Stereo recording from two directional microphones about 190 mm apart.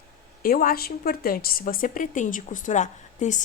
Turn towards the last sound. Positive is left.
turn(degrees=40)  # may be behind; listen again after turning